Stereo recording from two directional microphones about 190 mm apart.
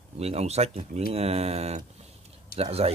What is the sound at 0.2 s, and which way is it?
Speech, 35° right (ahead or behind).